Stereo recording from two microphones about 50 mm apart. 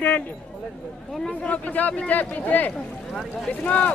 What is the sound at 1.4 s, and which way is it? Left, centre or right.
Speech, left.